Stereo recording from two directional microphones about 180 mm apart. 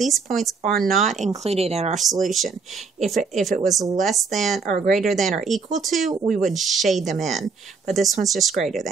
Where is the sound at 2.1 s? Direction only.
Centre (ahead or behind).